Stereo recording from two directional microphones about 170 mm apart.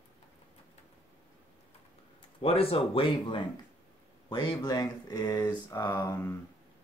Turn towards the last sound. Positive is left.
turn(degrees=15)  # may be behind; listen again after turning